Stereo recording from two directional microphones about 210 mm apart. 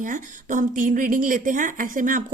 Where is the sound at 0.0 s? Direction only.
40° right (ahead or behind).